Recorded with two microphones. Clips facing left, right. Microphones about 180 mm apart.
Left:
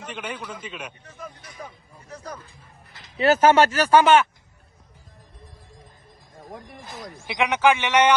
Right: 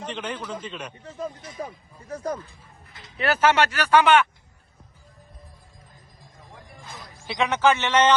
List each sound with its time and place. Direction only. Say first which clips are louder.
0.1 s a man's voice: right 1 dB; 10° left (ahead or behind)
1.0 s speech: right 7 dB; 25° right (ahead or behind)
3.2 s speech: left 4 dB; 40° left (ahead or behind)
6.7 s speech: left 3 dB; 85° left
7.3 s a man's voice: left 1 dB; 15° left (ahead or behind)